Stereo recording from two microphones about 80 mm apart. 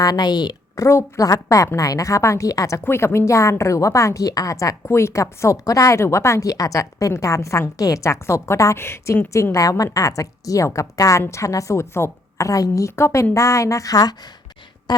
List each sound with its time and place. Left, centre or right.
0.0 s a woman's voice: left
0.8 s a woman's voice: left
2.8 s a woman's voice: left
12.5 s a woman's voice: left